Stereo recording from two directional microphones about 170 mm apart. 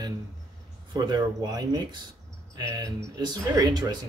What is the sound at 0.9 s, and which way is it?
Speech, 25° right (ahead or behind).